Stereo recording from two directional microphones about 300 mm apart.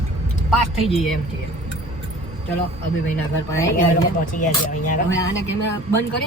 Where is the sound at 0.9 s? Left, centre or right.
Centre.